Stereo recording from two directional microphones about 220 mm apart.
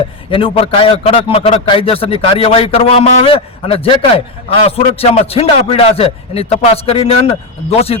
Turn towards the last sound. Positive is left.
turn(degrees=25)  # may be behind; listen again after turning